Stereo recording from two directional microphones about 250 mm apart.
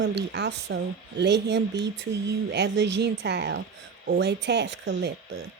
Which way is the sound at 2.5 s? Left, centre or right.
Right.